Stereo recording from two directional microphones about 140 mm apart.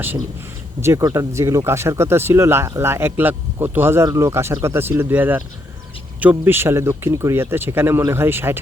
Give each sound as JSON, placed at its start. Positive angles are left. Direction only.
{"t": 0.8, "sound": "speech", "side_deg": -20}